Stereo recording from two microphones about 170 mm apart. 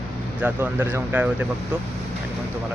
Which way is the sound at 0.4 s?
10° right (ahead or behind).